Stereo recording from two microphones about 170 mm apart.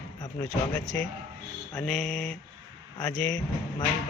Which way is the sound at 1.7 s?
5° left (ahead or behind).